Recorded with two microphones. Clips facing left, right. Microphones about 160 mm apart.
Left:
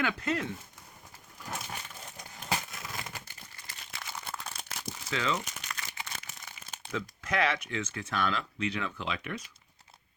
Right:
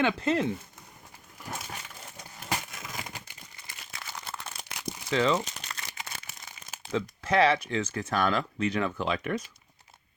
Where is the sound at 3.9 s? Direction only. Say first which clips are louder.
Even; centre (ahead or behind).